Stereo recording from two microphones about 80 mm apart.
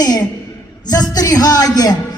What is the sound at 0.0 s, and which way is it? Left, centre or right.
A woman's voice, left.